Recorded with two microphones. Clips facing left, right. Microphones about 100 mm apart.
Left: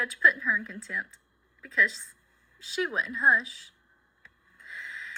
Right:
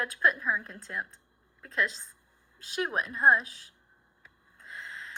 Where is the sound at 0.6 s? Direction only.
50° right (ahead or behind).